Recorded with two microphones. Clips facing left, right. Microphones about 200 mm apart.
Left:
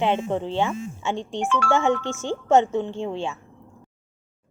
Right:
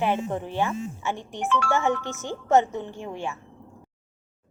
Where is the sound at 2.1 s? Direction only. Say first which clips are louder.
Left 5 dB; 20° right (ahead or behind).